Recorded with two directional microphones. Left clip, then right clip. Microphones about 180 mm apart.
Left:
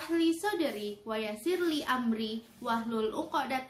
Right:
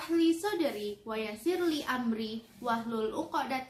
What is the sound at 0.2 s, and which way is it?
A woman's voice, 15° left (ahead or behind).